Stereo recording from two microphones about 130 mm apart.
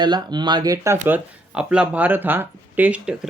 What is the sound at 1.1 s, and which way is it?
Speech, 5° right (ahead or behind).